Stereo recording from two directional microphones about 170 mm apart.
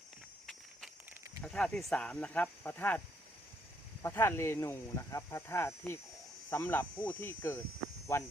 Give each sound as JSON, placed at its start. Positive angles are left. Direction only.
{"t": 1.4, "sound": "speech", "side_deg": 5}
{"t": 4.0, "sound": "speech", "side_deg": 15}